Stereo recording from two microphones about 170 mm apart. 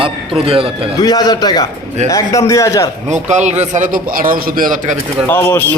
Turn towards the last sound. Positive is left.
turn(degrees=10)  # may be behind; listen again after turning